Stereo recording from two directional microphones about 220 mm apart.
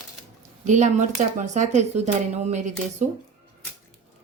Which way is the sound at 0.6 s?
35° right (ahead or behind).